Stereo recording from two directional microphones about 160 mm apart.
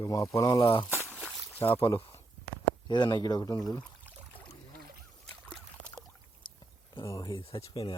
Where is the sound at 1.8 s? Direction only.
30° left (ahead or behind).